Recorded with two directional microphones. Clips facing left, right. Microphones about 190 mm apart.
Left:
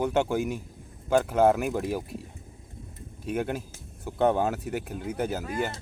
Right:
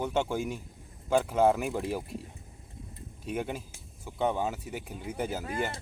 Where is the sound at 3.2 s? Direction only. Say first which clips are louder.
Left 4 dB; centre (ahead or behind).